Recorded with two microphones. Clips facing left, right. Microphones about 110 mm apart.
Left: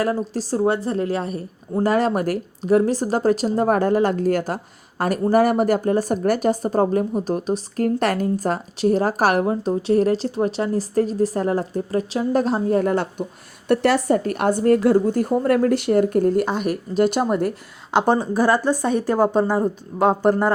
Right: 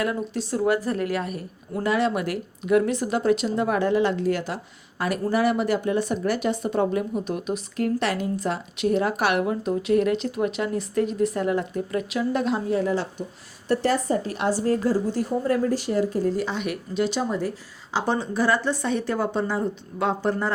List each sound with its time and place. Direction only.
0.0 s speech: 35° left (ahead or behind); by 13.2 s 55° left (ahead or behind)
13.7 s a woman's voice: 65° left (ahead or behind); by 20.5 s 50° left (ahead or behind)